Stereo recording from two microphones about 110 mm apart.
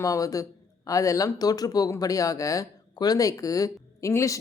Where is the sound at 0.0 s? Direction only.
30° left (ahead or behind).